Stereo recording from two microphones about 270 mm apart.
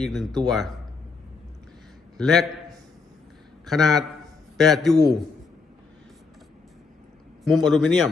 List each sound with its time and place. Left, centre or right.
0.0 s a man's voice: centre
2.1 s a man's voice: centre
7.4 s a man's voice: centre